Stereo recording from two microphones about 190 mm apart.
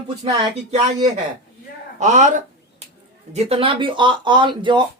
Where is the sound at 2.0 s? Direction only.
40° right (ahead or behind).